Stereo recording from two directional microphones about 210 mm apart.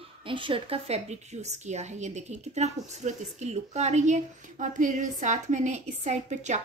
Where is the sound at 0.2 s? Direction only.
25° right (ahead or behind).